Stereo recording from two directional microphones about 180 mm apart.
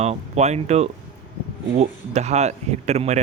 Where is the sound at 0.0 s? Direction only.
35° right (ahead or behind).